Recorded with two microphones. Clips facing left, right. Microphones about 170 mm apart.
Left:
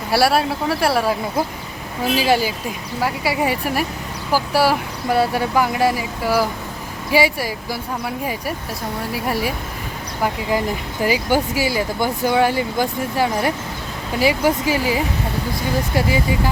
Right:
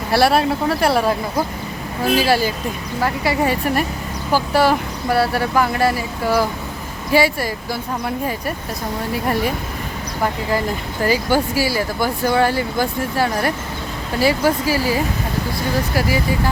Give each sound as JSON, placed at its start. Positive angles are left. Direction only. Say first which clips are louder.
{"t": 0.1, "sound": "speech", "louder": "right 2 dB", "side_deg": 5}
{"t": 2.1, "sound": "speech", "louder": "even", "side_deg": 15}
{"t": 11.0, "sound": "speech", "louder": "right 1 dB", "side_deg": 15}